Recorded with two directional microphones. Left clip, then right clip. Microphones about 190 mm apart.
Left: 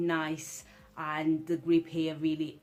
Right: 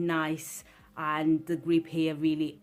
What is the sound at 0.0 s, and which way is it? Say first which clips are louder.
Speech: right 2 dB; 40° right (ahead or behind).